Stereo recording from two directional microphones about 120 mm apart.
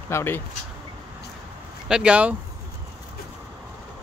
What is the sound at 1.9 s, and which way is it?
Speech, 10° right (ahead or behind).